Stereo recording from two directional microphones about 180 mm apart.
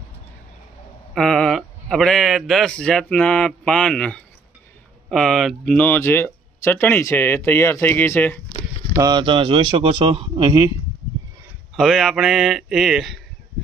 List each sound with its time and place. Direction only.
1.1 s speech: 5° left (ahead or behind)
8.9 s a man's voice: 20° right (ahead or behind)
11.7 s a man's voice: centre (ahead or behind)